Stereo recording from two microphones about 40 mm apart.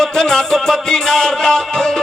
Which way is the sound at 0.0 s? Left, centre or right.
Centre.